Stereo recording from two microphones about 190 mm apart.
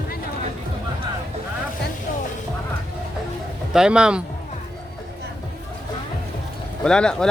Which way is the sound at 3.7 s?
5° right (ahead or behind).